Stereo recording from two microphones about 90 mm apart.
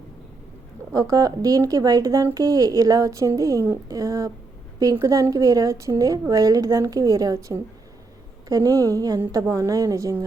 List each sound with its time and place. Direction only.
0.9 s a woman's voice: 40° right (ahead or behind)